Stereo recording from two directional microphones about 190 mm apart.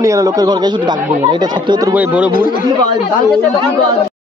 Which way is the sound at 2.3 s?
45° left (ahead or behind).